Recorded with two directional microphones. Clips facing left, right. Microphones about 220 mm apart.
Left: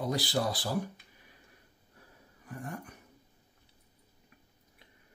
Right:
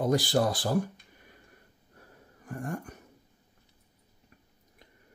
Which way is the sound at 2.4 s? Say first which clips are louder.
Right 5 dB; 50° right (ahead or behind).